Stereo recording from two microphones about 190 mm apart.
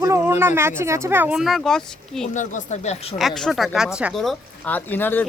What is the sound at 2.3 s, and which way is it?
Speech, 40° left (ahead or behind).